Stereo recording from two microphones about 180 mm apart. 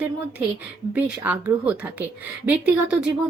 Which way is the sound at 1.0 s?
10° right (ahead or behind).